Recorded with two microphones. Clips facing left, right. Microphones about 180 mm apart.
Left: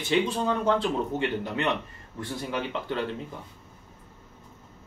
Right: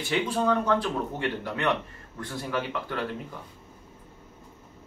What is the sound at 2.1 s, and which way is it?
Speech, 20° left (ahead or behind).